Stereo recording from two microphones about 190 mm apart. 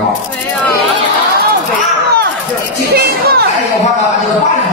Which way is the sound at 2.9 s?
55° right (ahead or behind).